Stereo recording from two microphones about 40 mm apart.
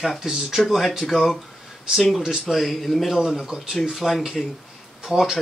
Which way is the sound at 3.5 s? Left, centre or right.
Centre.